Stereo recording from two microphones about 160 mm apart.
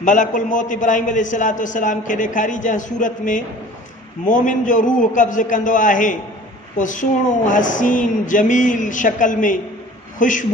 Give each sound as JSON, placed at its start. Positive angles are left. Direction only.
{"t": 0.0, "sound": "a man's voice", "side_deg": 50}